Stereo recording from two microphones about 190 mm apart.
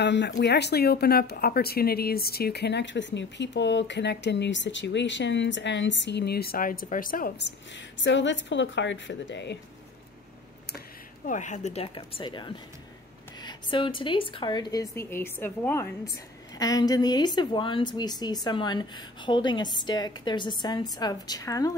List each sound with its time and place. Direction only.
0.0 s a woman's voice: 65° left (ahead or behind); by 7.3 s 50° left (ahead or behind)
8.0 s speech: 75° left (ahead or behind)
11.2 s speech: 40° left (ahead or behind); by 21.7 s 20° left (ahead or behind)